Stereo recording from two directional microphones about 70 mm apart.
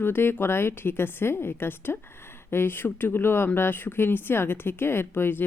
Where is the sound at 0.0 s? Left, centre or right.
Left.